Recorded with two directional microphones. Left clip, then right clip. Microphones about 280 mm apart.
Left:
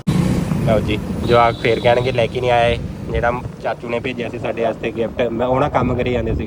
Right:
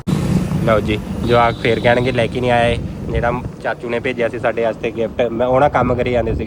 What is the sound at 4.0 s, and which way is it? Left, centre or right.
Speech, centre.